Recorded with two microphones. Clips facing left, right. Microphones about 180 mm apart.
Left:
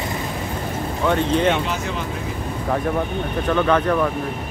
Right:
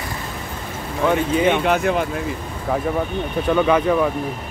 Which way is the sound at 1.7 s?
55° right (ahead or behind).